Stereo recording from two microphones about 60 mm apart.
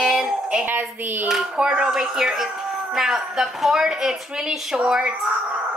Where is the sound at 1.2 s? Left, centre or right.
Centre.